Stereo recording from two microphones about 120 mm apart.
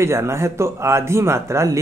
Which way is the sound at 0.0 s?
20° right (ahead or behind).